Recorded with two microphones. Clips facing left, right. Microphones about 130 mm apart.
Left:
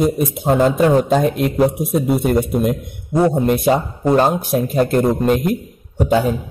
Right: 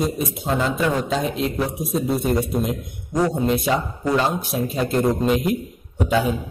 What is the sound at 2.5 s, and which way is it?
A man's voice, 60° left (ahead or behind).